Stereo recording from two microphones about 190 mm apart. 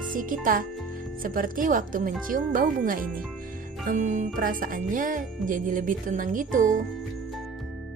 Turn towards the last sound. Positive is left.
turn(degrees=-45)  # may be behind; listen again after turning